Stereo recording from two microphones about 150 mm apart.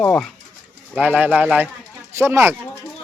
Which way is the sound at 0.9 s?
10° right (ahead or behind).